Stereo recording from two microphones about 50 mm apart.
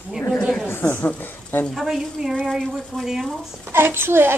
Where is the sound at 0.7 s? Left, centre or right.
Left.